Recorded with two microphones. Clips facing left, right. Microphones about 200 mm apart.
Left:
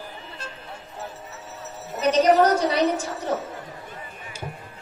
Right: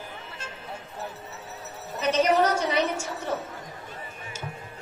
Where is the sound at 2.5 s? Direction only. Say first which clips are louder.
Left 4 dB; 35° left (ahead or behind).